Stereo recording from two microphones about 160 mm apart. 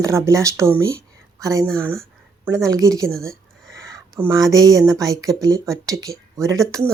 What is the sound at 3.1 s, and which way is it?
Speech, 5° left (ahead or behind).